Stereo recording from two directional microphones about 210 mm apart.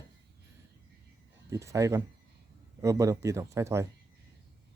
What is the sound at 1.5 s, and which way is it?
Speech, 15° right (ahead or behind).